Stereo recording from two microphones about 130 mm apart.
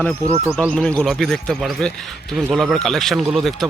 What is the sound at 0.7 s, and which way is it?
Speech, 10° left (ahead or behind).